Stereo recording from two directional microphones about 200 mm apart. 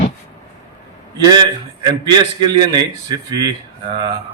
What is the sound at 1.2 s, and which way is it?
A man's voice, 20° right (ahead or behind).